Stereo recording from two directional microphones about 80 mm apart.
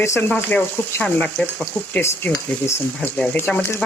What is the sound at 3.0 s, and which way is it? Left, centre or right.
Speech, left.